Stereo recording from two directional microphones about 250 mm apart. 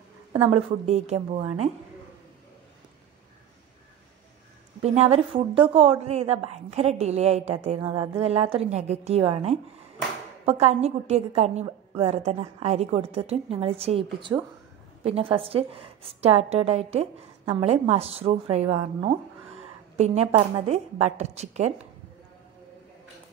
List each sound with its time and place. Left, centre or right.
0.3 s a woman's voice: right
4.8 s a woman's voice: right